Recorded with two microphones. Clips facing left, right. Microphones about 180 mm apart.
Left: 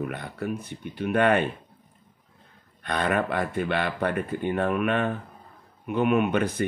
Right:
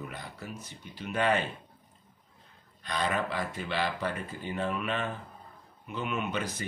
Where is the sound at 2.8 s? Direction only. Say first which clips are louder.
Left 5 dB; 60° left (ahead or behind).